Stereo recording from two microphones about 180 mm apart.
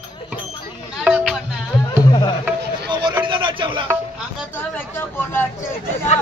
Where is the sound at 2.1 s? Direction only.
25° left (ahead or behind).